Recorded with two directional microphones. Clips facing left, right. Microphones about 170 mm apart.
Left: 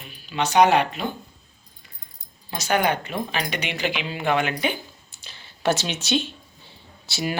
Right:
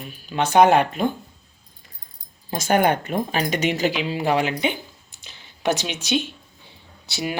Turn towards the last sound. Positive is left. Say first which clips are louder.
# even
turn(degrees=-15)  # may be behind; listen again after turning